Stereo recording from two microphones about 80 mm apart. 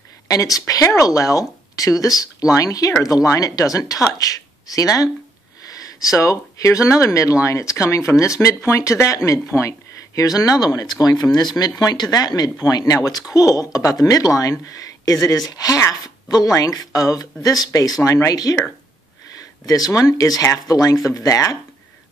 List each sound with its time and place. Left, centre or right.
0.3 s speech: left
14.7 s a sound: left
15.2 s speech: left
19.6 s speech: left